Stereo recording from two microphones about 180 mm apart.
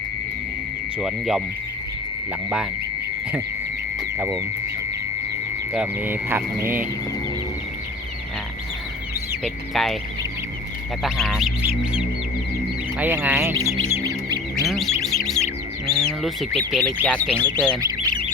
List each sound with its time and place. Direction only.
0.9 s speech: centre (ahead or behind)
5.7 s speech: 5° right (ahead or behind)
9.4 s speech: centre (ahead or behind)
11.0 s speech: centre (ahead or behind)
13.0 s speech: 10° right (ahead or behind)
13.9 s music: 20° right (ahead or behind)
14.7 s bird: centre (ahead or behind)
16.7 s speech: 5° left (ahead or behind)
17.7 s bird: 20° right (ahead or behind)